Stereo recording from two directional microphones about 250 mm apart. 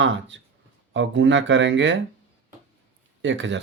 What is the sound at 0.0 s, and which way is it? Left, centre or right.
Speech, right.